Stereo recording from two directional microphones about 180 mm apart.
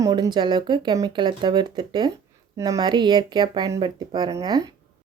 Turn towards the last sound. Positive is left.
turn(degrees=-20)  # may be behind; listen again after turning